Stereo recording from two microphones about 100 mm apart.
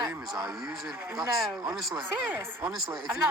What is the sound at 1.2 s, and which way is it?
Speech, 5° right (ahead or behind).